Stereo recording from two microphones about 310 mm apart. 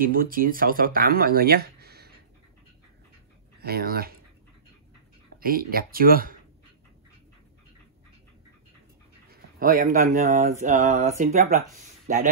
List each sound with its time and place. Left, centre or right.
0.0 s speech: right
3.5 s speech: right
5.4 s speech: right
9.3 s speech: right